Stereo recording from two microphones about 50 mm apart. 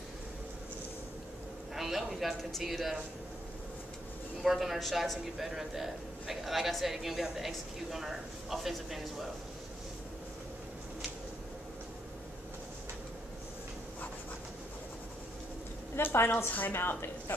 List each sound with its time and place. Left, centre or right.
1.8 s speech: centre
4.4 s speech: centre
16.0 s a woman's voice: left